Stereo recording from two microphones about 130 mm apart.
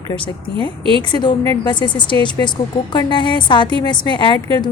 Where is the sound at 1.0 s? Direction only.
35° left (ahead or behind).